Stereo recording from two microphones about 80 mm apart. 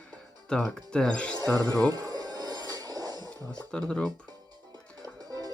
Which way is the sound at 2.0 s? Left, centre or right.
Right.